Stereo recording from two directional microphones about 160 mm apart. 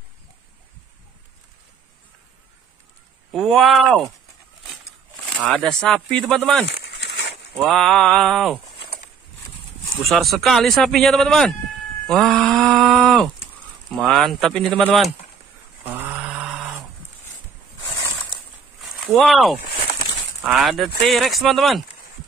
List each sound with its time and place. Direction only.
3.3 s speech: centre (ahead or behind)
5.3 s speech: centre (ahead or behind)
7.0 s a sound: 90° left
7.5 s speech: centre (ahead or behind)
10.0 s speech: centre (ahead or behind)
15.8 s a sound: 10° right (ahead or behind)
19.1 s speech: 5° left (ahead or behind)